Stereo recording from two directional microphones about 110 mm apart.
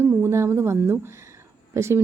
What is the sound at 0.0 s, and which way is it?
A woman's voice, 20° right (ahead or behind).